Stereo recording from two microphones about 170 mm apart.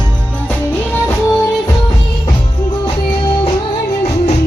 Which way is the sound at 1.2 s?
15° left (ahead or behind).